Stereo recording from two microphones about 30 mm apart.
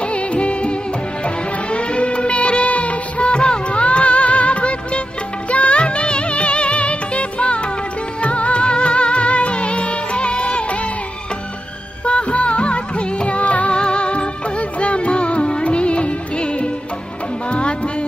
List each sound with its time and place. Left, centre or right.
0.0 s music of bollywood: left
1.2 s music: left
3.3 s music: left
12.0 s music: left
13.7 s music: left